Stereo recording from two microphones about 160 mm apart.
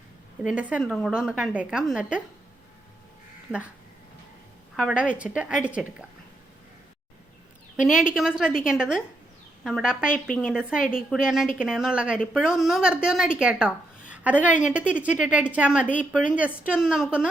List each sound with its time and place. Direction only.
0.4 s speech: 5° right (ahead or behind)
4.8 s a woman's voice: 5° right (ahead or behind)
7.8 s a woman's voice: 5° right (ahead or behind)